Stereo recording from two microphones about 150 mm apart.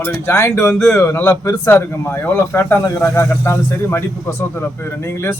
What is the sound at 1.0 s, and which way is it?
Speech, 20° left (ahead or behind).